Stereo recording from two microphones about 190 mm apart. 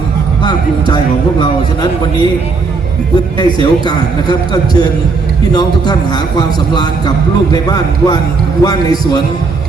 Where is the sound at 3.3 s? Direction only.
20° left (ahead or behind).